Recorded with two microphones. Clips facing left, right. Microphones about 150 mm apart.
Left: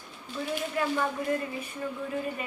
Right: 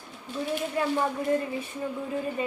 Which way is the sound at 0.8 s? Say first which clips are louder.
Right 1 dB; 25° right (ahead or behind).